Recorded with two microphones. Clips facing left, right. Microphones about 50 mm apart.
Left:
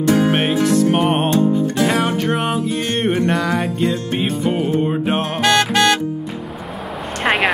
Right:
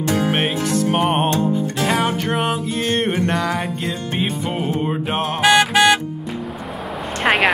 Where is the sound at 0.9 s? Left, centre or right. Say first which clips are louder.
Left 1 dB; centre.